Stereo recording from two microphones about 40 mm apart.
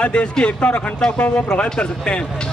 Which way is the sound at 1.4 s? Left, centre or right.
Left.